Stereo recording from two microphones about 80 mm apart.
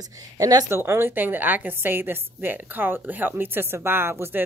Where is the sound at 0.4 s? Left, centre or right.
Right.